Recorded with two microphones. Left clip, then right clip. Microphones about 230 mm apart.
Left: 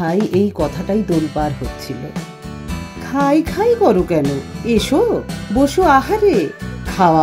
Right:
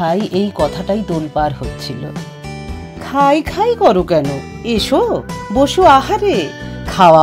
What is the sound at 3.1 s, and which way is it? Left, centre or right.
A woman's voice, right.